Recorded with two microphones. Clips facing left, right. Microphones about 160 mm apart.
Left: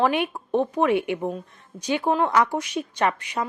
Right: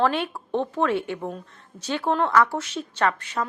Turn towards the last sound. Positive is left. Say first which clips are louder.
# even
turn(degrees=15)  # may be behind; listen again after turning